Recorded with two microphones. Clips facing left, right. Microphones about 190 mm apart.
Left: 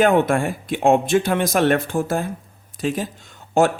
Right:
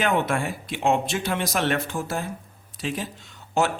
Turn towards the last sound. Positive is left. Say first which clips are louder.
# left 6 dB
turn(degrees=50)  # may be behind; listen again after turning